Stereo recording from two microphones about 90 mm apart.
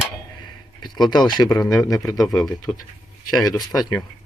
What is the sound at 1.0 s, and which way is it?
Speech, 50° left (ahead or behind).